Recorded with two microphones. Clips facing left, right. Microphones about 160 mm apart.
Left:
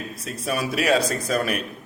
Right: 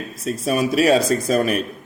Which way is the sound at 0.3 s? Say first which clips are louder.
Right 7 dB; 25° right (ahead or behind).